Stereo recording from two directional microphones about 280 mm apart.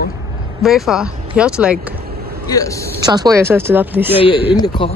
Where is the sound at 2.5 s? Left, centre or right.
Centre.